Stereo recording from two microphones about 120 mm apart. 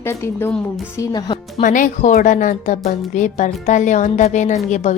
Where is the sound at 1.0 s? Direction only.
35° left (ahead or behind).